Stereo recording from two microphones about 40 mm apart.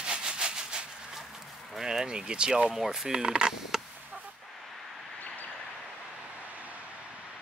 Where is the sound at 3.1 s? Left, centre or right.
Right.